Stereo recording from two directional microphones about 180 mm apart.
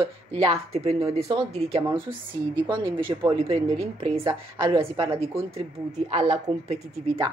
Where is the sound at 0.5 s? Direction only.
35° right (ahead or behind).